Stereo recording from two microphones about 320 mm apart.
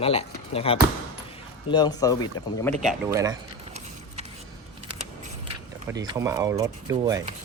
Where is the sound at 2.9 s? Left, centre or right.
Centre.